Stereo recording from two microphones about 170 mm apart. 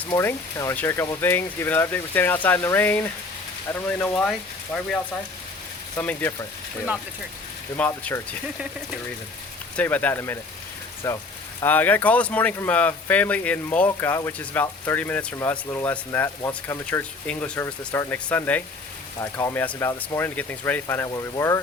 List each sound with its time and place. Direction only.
0.1 s speech: 15° left (ahead or behind)
6.0 s speech: 10° left (ahead or behind)
7.8 s speech: 10° left (ahead or behind)
9.7 s speech: 10° left (ahead or behind)